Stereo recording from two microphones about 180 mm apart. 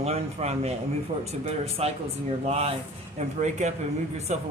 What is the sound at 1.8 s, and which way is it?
Speech, 35° right (ahead or behind).